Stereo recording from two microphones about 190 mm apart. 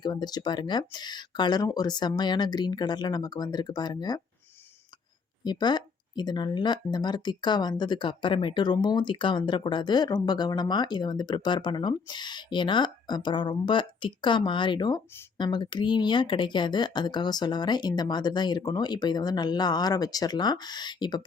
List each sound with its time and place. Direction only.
0.0 s speech: 20° left (ahead or behind)
5.4 s speech: 20° left (ahead or behind)